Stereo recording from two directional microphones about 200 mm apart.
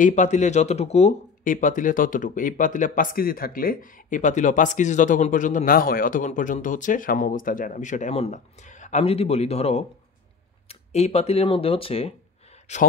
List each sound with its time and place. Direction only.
0.0 s speech: 35° left (ahead or behind)